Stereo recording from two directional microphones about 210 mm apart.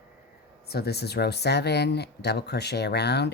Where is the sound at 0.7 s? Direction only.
50° left (ahead or behind).